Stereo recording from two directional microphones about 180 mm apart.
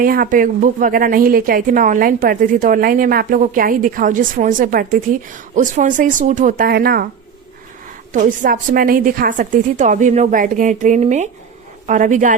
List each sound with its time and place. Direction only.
0.0 s a woman's voice: 50° right (ahead or behind)
8.1 s a woman's voice: 45° right (ahead or behind)